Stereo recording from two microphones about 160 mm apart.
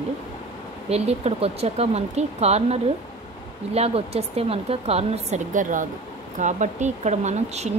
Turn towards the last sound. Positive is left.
turn(degrees=-45)  # may be behind; listen again after turning